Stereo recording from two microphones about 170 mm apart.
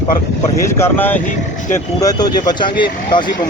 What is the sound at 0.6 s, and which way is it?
Speech, 15° left (ahead or behind).